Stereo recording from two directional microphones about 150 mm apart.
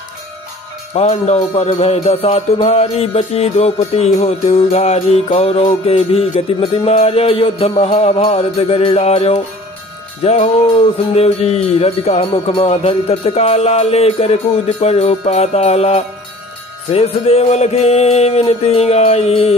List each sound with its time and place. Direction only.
0.9 s music: 45° left (ahead or behind)